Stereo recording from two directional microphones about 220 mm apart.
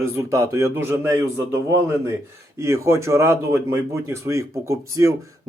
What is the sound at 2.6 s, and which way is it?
Speech, 15° right (ahead or behind).